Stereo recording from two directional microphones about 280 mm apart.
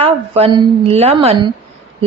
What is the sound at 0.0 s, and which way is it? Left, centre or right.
A woman's voice, centre.